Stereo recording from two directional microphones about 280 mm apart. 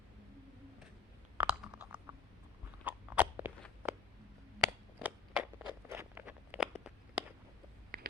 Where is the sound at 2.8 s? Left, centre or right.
Centre.